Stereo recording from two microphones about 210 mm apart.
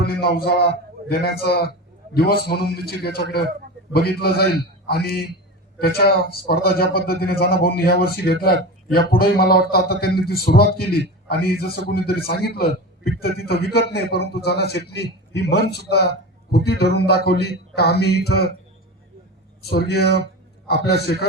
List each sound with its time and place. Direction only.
0.0 s a man's voice: 50° left (ahead or behind)
19.7 s a man's voice: 50° left (ahead or behind)